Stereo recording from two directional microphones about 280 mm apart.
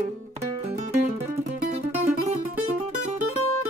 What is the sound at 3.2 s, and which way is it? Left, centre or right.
Music, right.